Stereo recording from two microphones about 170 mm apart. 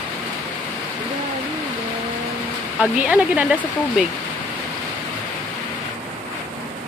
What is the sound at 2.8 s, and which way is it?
Speech, 10° right (ahead or behind).